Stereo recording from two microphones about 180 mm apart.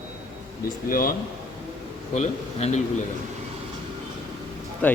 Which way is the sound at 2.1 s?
40° left (ahead or behind).